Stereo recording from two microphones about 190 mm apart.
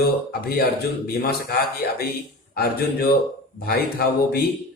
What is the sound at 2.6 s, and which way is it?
A man's voice, 55° left (ahead or behind).